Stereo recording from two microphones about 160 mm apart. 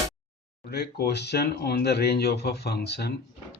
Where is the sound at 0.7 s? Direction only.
80° left.